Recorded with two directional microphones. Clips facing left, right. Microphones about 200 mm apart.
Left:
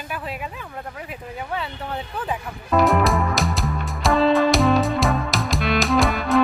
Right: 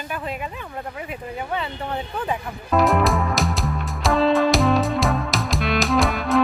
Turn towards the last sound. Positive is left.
turn(degrees=0)  # may be behind; listen again after turning